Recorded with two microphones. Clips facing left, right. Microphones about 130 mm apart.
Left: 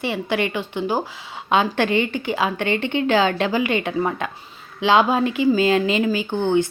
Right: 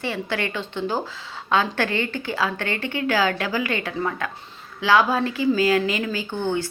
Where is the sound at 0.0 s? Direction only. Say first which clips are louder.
Left 4 dB; 15° left (ahead or behind).